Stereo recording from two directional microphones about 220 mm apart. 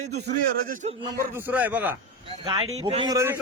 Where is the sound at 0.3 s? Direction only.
40° right (ahead or behind).